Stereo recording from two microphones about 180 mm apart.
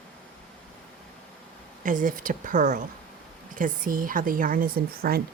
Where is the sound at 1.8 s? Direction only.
50° right (ahead or behind).